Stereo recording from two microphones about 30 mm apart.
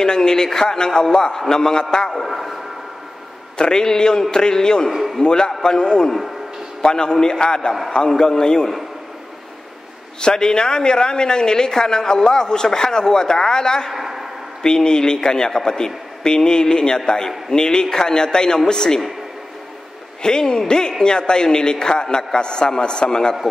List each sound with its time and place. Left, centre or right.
0.0 s speech: left
2.2 s a sound: centre
3.5 s speech: left
10.2 s speech: left
13.9 s a sound: centre
14.6 s speech: left
20.2 s a man's voice: left